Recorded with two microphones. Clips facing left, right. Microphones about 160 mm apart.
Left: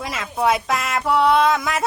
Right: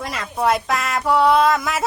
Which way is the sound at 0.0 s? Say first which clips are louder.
Even; centre (ahead or behind).